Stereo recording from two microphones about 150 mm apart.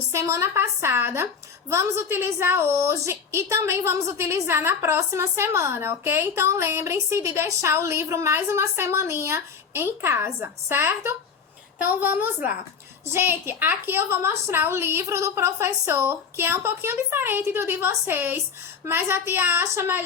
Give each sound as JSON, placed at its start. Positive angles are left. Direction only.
{"t": 0.1, "sound": "a woman's voice", "side_deg": -20}